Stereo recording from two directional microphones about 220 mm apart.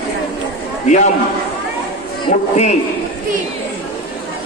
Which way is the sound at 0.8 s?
35° left (ahead or behind).